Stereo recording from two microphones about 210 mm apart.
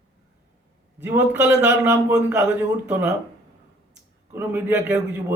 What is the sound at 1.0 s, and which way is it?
A man's voice, 5° right (ahead or behind).